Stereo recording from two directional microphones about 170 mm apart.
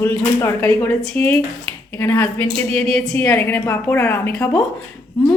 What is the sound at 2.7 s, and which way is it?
A woman's voice, centre (ahead or behind).